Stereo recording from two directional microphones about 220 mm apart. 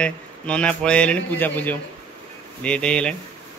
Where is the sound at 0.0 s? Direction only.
5° left (ahead or behind).